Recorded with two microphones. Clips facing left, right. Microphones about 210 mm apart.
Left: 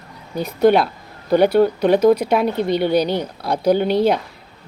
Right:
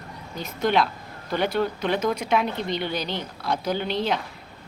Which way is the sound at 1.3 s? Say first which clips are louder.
Left 10 dB; 45° left (ahead or behind).